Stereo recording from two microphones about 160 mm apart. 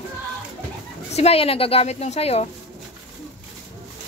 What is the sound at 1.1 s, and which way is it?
A woman's voice, 40° left (ahead or behind).